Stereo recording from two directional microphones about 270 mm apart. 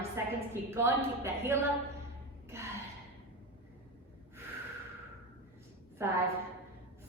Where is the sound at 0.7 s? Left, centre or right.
Centre.